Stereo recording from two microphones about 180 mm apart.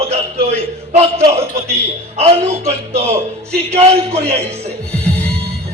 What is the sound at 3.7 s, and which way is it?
Speech, 35° right (ahead or behind).